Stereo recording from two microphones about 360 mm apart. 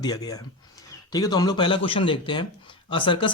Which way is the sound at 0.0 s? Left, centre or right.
Centre.